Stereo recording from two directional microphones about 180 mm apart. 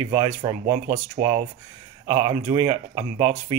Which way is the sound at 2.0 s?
20° right (ahead or behind).